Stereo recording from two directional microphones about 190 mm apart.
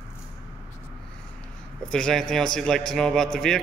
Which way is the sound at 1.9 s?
5° left (ahead or behind).